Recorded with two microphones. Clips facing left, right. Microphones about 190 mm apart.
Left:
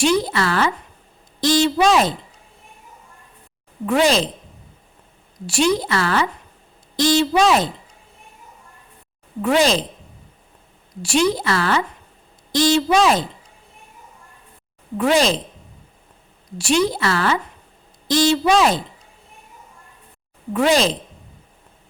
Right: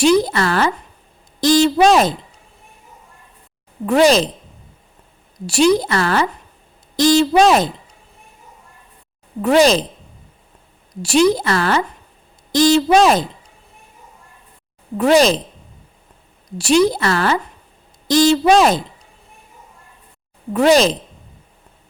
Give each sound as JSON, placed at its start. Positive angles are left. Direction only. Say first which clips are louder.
{"t": 0.0, "sound": "a woman's voice", "louder": "right 4 dB", "side_deg": -40}
{"t": 3.8, "sound": "a woman's voice", "louder": "right 4 dB", "side_deg": -40}
{"t": 5.5, "sound": "a woman's voice", "louder": "right 4 dB", "side_deg": -40}
{"t": 9.4, "sound": "a woman's voice", "louder": "right 4 dB", "side_deg": -40}
{"t": 11.0, "sound": "a woman's voice", "louder": "right 4 dB", "side_deg": -40}
{"t": 14.9, "sound": "a woman's voice", "louder": "right 4 dB", "side_deg": -40}
{"t": 16.6, "sound": "a woman's voice", "louder": "right 5 dB", "side_deg": -40}
{"t": 20.5, "sound": "a woman's voice", "louder": "right 4 dB", "side_deg": -40}